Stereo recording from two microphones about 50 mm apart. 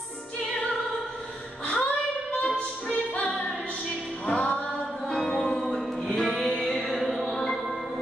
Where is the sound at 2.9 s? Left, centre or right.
Left; by 7.6 s centre.